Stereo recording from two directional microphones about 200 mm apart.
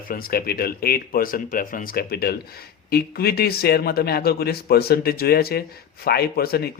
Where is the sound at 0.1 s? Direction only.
45° left (ahead or behind).